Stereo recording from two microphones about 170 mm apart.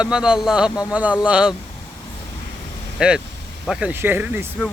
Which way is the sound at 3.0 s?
5° right (ahead or behind).